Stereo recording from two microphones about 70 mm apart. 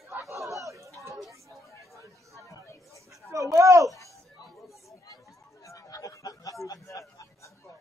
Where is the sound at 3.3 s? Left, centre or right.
Right.